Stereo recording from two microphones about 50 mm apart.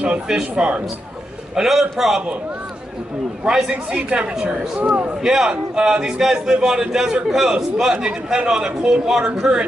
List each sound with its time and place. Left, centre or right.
0.3 s speech: right
1.5 s speech: centre
3.4 s speech: centre
3.7 s speech: right; by 9.6 s centre